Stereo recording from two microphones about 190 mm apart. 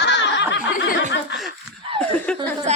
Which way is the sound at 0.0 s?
65° left (ahead or behind).